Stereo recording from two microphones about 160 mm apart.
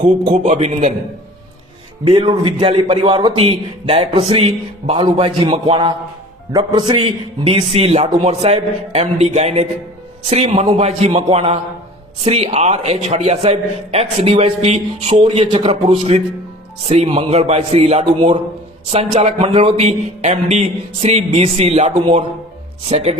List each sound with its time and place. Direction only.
0.0 s a man's voice: 50° right (ahead or behind)
2.0 s a man's voice: 35° right (ahead or behind)
21.9 s a man's voice: 35° right (ahead or behind)